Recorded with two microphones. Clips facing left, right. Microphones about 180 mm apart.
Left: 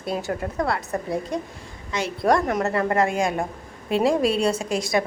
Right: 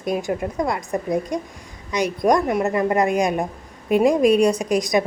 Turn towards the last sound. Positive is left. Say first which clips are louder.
# right 4 dB
turn(degrees=-15)  # may be behind; listen again after turning